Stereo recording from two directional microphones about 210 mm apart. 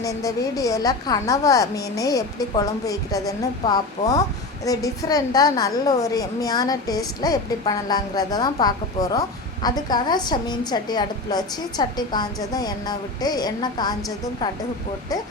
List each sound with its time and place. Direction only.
0.0 s a woman's voice: 15° left (ahead or behind)